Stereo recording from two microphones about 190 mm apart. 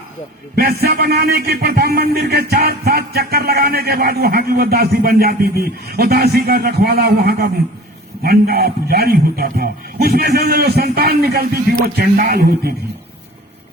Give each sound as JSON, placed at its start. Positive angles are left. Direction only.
{"t": 0.5, "sound": "a man's voice", "side_deg": -55}